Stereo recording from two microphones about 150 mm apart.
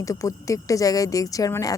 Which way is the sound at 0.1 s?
20° left (ahead or behind).